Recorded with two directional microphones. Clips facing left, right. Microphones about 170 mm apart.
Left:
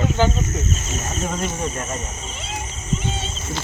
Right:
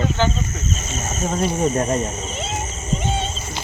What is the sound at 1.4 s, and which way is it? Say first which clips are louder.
Speech: right 7 dB; 35° right (ahead or behind).